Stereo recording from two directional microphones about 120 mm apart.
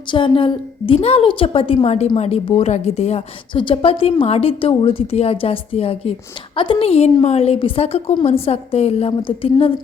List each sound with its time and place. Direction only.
0.1 s a woman's voice: 45° left (ahead or behind)
3.5 s a woman's voice: 45° left (ahead or behind)